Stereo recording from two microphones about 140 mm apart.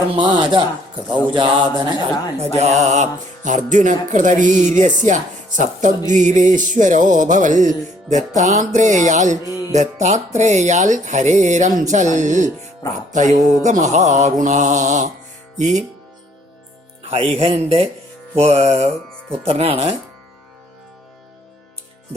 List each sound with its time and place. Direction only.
0.1 s mantra: 35° right (ahead or behind)
2.4 s speech: 55° right (ahead or behind)
9.5 s music: 20° right (ahead or behind)
9.7 s speech: 55° right (ahead or behind)
17.0 s speech: 45° right (ahead or behind)